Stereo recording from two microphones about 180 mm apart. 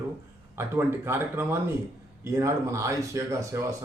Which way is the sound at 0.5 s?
15° right (ahead or behind).